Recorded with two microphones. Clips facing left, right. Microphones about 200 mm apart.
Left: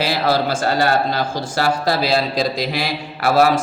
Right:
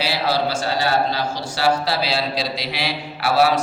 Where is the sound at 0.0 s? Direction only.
50° left (ahead or behind).